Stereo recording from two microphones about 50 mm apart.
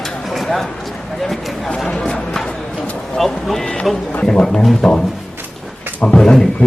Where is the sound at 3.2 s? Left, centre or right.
Centre.